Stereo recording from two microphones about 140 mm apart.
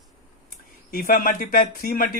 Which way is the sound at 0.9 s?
85° left.